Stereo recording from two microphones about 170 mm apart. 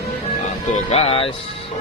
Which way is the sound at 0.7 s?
35° left (ahead or behind).